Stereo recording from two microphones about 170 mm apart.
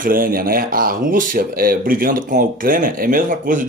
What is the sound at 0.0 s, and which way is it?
Speech, 55° right (ahead or behind).